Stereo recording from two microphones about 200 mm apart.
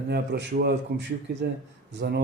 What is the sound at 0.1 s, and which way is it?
Speech, 55° right (ahead or behind).